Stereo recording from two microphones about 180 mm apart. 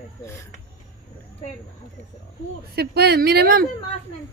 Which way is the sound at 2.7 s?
65° right (ahead or behind).